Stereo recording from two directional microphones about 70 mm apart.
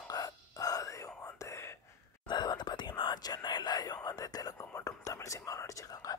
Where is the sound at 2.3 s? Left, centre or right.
Left.